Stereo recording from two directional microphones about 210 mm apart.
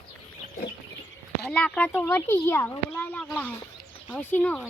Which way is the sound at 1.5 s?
5° left (ahead or behind).